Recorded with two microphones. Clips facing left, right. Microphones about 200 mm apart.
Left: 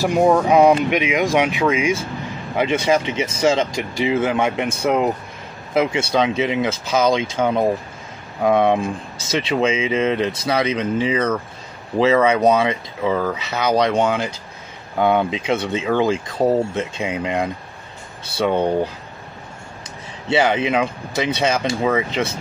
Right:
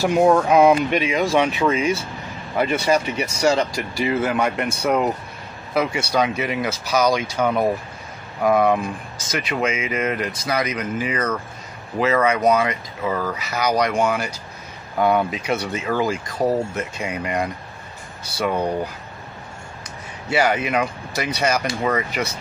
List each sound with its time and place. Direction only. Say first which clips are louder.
0.2 s speech: left 1 dB; centre (ahead or behind)
0.8 s speech: left 2 dB; 15° left (ahead or behind)
20.2 s speech: left 2 dB; 25° left (ahead or behind)